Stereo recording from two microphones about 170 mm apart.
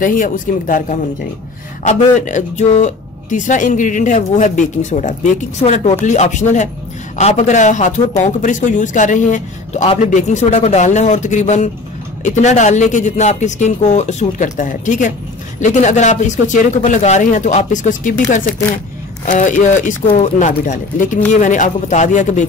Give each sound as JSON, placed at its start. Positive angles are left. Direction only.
{"t": 0.0, "sound": "speech", "side_deg": 50}